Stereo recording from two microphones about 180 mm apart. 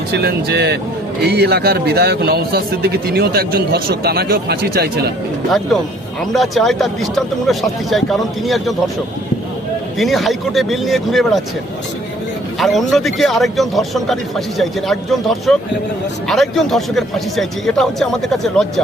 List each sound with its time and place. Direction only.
0.1 s a man's voice: 65° right (ahead or behind)
6.3 s a man's voice: centre (ahead or behind)
10.0 s a man's voice: centre (ahead or behind)
12.5 s a man's voice: centre (ahead or behind)